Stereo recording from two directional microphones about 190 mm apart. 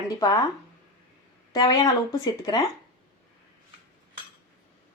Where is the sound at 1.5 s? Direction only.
20° left (ahead or behind).